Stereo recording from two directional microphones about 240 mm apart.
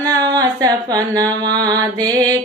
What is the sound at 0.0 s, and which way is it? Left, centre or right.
Music, centre.